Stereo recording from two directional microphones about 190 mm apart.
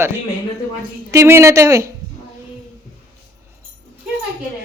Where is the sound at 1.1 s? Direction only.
15° right (ahead or behind).